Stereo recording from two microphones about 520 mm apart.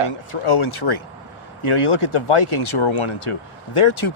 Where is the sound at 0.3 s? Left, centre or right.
Left.